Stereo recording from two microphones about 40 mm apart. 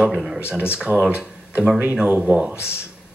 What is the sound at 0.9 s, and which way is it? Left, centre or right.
Speech, right.